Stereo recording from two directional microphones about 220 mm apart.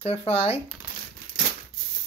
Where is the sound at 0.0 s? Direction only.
25° left (ahead or behind).